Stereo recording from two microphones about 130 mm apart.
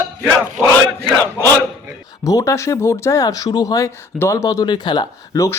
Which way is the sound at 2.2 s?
25° left (ahead or behind).